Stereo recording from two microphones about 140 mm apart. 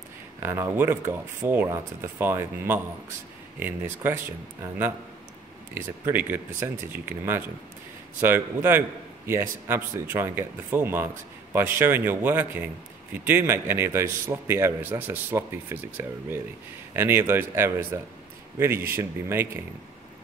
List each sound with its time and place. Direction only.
0.4 s a man's voice: 15° right (ahead or behind)
5.8 s a man's voice: 15° right (ahead or behind)